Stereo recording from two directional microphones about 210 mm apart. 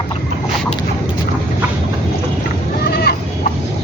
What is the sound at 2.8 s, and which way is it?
Goat, 50° left (ahead or behind).